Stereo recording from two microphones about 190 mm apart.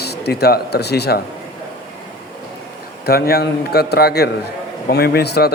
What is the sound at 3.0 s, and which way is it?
Speech, 55° left (ahead or behind).